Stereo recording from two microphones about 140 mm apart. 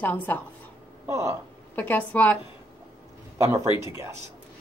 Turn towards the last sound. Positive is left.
turn(degrees=-20)  # may be behind; listen again after turning